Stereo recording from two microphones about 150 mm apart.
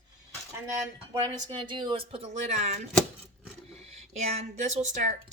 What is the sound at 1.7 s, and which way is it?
Speech, 35° right (ahead or behind).